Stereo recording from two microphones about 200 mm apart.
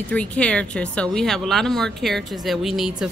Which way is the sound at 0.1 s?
5° left (ahead or behind).